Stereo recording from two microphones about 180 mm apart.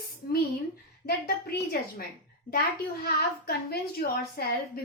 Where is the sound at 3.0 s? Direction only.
60° left (ahead or behind).